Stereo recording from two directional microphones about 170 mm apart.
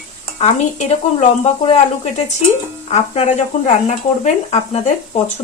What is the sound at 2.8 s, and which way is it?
Speech, 40° left (ahead or behind).